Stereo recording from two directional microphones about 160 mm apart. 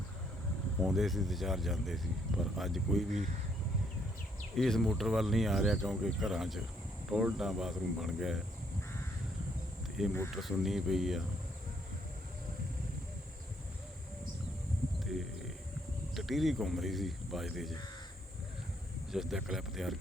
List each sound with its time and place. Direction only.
0.8 s speech: centre (ahead or behind)
4.5 s speech: centre (ahead or behind)
10.0 s speech: centre (ahead or behind)
16.1 s speech: centre (ahead or behind)
19.1 s speech: centre (ahead or behind)